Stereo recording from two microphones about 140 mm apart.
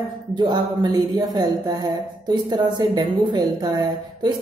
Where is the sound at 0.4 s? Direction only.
30° right (ahead or behind).